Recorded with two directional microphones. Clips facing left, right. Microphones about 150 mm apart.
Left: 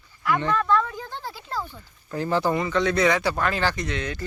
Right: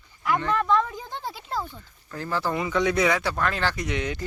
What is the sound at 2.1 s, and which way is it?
Speech, 20° left (ahead or behind).